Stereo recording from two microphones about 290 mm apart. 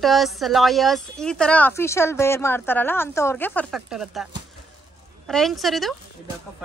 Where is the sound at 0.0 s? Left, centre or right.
Centre.